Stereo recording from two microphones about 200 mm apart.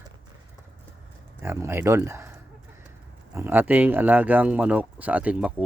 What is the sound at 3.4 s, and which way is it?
Speech, 10° right (ahead or behind).